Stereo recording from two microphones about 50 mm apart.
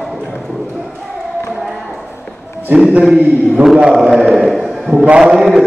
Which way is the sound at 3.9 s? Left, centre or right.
Centre.